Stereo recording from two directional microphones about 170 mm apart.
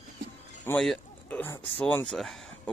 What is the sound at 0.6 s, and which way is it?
Speech, 5° left (ahead or behind).